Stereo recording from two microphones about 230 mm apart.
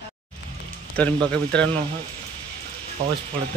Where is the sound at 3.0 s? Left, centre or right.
Right.